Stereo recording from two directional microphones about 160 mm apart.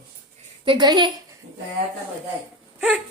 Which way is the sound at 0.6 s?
25° right (ahead or behind).